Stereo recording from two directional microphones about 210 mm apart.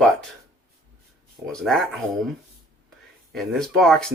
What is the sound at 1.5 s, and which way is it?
Speech, centre (ahead or behind).